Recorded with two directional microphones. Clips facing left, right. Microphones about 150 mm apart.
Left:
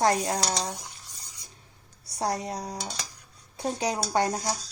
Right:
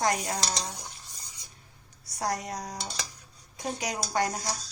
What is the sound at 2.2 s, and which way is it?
A woman's voice, 30° left (ahead or behind).